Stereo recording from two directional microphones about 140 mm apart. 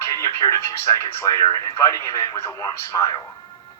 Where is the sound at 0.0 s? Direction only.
25° left (ahead or behind).